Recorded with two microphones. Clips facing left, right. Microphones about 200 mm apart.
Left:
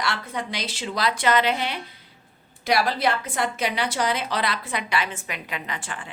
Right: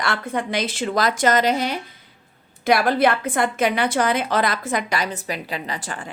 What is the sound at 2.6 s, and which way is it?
A woman's voice, 55° right (ahead or behind).